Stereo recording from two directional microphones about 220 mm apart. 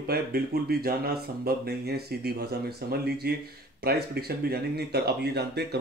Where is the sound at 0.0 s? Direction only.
45° right (ahead or behind).